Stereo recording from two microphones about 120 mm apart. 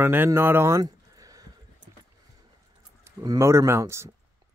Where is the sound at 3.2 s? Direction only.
30° right (ahead or behind).